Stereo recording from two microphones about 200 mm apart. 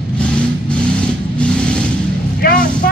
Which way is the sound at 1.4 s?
5° left (ahead or behind).